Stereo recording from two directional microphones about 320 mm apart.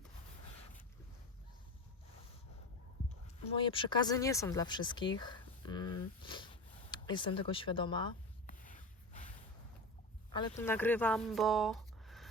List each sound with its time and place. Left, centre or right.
3.6 s speech: centre
8.5 s a sound: left
10.6 s speech: centre